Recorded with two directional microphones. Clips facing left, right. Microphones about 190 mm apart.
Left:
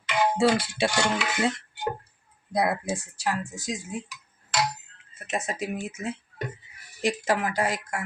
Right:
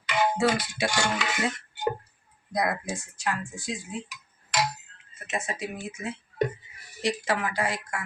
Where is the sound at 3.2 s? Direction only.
40° left (ahead or behind).